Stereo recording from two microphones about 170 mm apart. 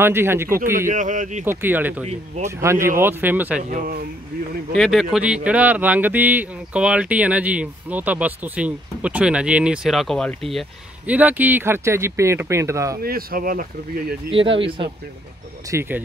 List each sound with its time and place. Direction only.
0.0 s speech: 15° right (ahead or behind)
0.7 s speech: 50° right (ahead or behind)
1.4 s speech: 10° right (ahead or behind)
4.7 s speech: centre (ahead or behind); by 13.0 s 20° right (ahead or behind)
13.0 s speech: 60° right (ahead or behind)
14.3 s speech: 30° right (ahead or behind)
15.7 s speech: 15° right (ahead or behind)